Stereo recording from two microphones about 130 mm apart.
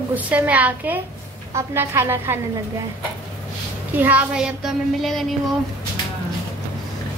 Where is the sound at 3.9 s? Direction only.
10° right (ahead or behind).